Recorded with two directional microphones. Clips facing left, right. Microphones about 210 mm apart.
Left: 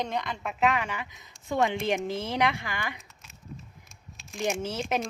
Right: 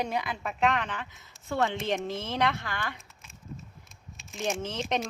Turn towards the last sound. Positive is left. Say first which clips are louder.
# left 1 dB
turn(degrees=5)  # may be behind; listen again after turning